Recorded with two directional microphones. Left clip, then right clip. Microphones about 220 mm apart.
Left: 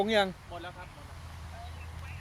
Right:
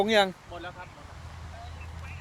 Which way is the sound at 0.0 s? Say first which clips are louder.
Right 4 dB; 10° right (ahead or behind).